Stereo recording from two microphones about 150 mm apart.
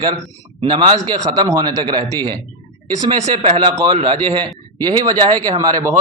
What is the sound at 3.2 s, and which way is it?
Speech, 45° right (ahead or behind).